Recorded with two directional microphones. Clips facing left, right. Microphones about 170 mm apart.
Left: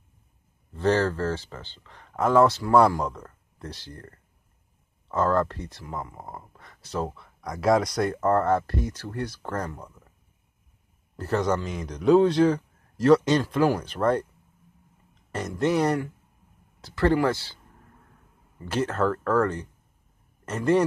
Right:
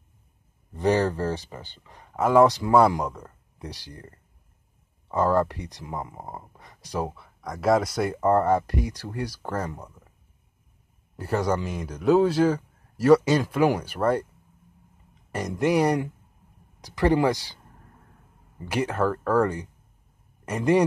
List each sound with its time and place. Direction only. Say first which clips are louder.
0.7 s a man's voice: right 1 dB; 15° right (ahead or behind)
7.4 s a man's voice: even; centre (ahead or behind)
11.1 s a man's voice: even; 10° right (ahead or behind)
15.3 s a man's voice: right 1 dB; 10° right (ahead or behind)
18.7 s a man's voice: even; 10° right (ahead or behind)